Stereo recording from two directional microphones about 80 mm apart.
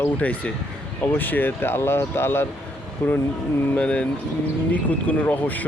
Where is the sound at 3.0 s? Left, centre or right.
Centre.